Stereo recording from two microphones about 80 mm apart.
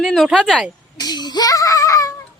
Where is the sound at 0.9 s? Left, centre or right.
Left.